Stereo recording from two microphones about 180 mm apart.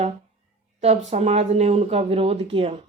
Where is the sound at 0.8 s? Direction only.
35° right (ahead or behind).